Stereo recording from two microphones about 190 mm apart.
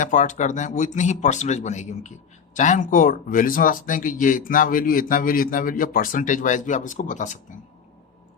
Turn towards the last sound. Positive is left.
turn(degrees=40)  # may be behind; listen again after turning